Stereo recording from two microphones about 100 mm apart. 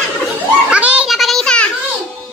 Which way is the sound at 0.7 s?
15° right (ahead or behind).